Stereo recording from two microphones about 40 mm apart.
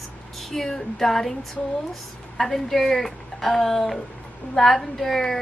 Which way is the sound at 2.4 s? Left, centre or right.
Centre.